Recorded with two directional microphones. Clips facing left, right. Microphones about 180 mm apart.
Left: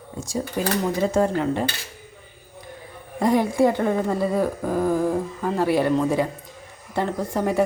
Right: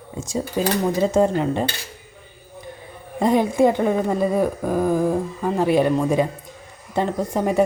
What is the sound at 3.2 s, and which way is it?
A woman's voice, 20° right (ahead or behind).